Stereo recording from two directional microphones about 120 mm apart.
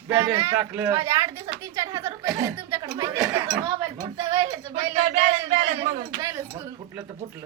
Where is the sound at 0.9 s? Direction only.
35° right (ahead or behind).